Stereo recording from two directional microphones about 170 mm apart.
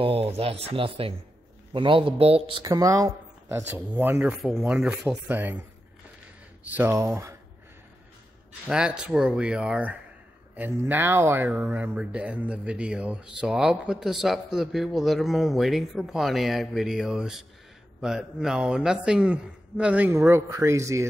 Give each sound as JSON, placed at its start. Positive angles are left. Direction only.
{"t": 0.0, "sound": "speech", "side_deg": -35}
{"t": 2.6, "sound": "a man's voice", "side_deg": -20}
{"t": 8.6, "sound": "a man's voice", "side_deg": -5}